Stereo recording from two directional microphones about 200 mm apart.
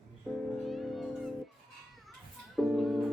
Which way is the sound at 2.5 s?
Centre (ahead or behind).